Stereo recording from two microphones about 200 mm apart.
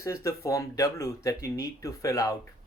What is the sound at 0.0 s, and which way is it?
Speech, 15° left (ahead or behind).